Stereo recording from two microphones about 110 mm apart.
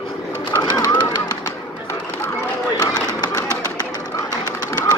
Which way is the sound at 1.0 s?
35° left (ahead or behind).